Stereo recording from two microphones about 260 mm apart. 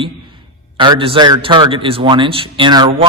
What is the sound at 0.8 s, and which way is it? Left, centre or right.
A man's voice, centre.